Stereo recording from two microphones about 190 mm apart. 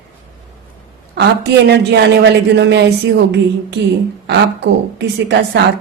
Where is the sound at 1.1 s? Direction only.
60° right (ahead or behind).